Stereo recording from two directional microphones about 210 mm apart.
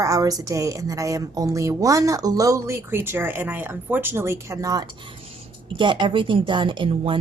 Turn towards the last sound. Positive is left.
turn(degrees=-25)  # may be behind; listen again after turning